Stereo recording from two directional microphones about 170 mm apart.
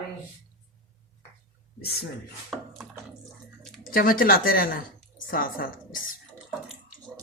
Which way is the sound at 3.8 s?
60° left (ahead or behind).